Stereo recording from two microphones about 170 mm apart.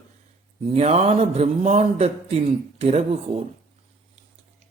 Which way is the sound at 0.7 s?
40° right (ahead or behind).